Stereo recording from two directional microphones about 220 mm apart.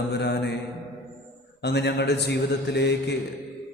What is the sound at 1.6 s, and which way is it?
Mantra, 50° left (ahead or behind).